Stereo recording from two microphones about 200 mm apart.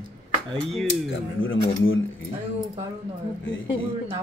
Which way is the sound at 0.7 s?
Centre (ahead or behind).